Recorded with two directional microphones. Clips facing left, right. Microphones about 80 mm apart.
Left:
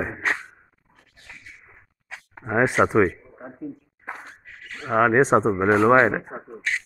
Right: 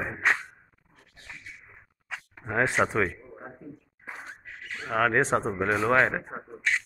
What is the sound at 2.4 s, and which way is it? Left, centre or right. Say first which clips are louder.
Speech: left 5 dB; centre.